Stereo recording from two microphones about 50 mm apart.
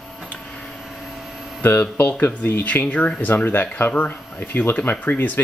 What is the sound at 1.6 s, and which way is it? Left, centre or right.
Speech, left.